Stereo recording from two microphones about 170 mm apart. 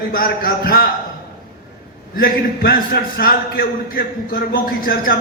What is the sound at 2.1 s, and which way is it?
A man's voice, 60° left (ahead or behind).